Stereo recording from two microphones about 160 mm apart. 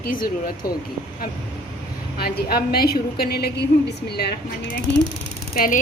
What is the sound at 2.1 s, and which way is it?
A woman's voice, 75° left (ahead or behind).